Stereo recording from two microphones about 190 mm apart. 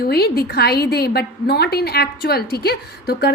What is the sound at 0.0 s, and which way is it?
A woman's voice, 55° left (ahead or behind).